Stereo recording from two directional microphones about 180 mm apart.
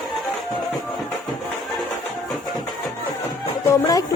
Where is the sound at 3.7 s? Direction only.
20° left (ahead or behind).